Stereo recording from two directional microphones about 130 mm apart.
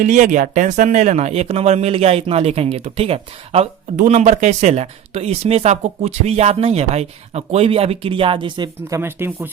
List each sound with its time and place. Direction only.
0.0 s speech: 75° right (ahead or behind); by 3.7 s 50° right (ahead or behind)
3.9 s speech: 65° right (ahead or behind); by 9.0 s 35° right (ahead or behind)
9.0 s speech: 20° right (ahead or behind)